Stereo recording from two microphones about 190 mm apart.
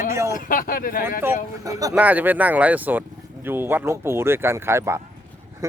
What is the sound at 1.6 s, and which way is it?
Speech, 15° right (ahead or behind).